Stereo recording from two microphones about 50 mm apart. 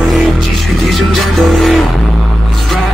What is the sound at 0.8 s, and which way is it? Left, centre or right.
Music, centre.